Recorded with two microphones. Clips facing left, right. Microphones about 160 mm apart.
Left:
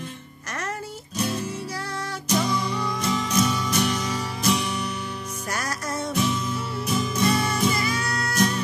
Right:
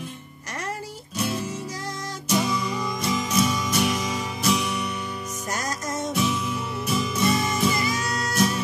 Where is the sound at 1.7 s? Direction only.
15° right (ahead or behind).